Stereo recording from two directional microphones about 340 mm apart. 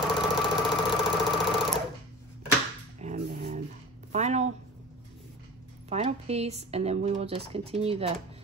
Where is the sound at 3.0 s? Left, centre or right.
Centre.